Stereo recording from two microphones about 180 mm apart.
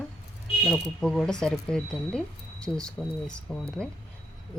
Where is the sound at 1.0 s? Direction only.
5° left (ahead or behind).